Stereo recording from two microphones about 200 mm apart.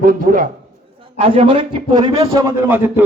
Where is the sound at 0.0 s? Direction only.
45° right (ahead or behind).